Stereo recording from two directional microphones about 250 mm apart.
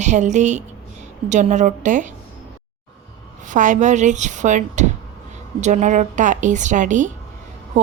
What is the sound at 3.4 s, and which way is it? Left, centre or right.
A woman's voice, right.